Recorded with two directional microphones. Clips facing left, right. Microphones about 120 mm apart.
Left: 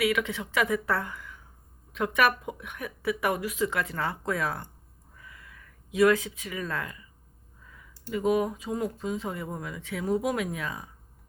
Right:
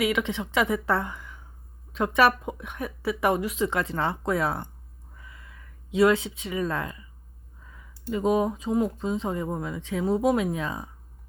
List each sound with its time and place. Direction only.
0.0 s speech: 25° right (ahead or behind)
5.1 s a sound: 25° right (ahead or behind)
7.7 s speech: 25° right (ahead or behind)